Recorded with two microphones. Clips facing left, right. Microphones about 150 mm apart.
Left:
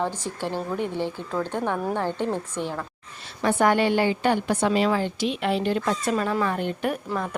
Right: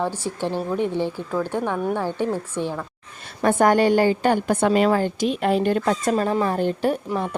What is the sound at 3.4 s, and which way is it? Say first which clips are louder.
A woman's voice: right 4 dB; 45° right (ahead or behind).